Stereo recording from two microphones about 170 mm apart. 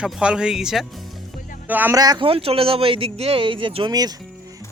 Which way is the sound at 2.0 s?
25° right (ahead or behind).